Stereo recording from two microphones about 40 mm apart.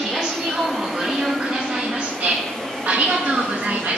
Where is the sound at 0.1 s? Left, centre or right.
Centre.